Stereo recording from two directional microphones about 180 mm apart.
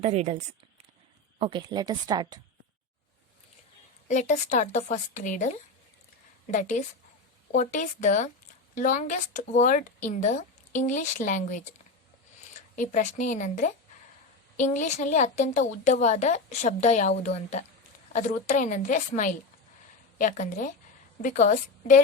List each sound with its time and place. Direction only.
0.0 s speech: 40° right (ahead or behind)
1.4 s a woman's voice: 25° right (ahead or behind)
4.1 s a woman's voice: 40° left (ahead or behind)
12.7 s a woman's voice: 45° left (ahead or behind)